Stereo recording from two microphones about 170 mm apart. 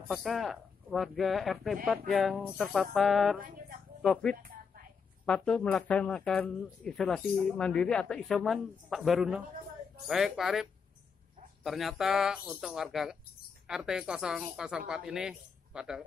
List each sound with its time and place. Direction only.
0.1 s speech: centre (ahead or behind)
3.3 s speech: 55° right (ahead or behind)
4.0 s speech: 5° left (ahead or behind)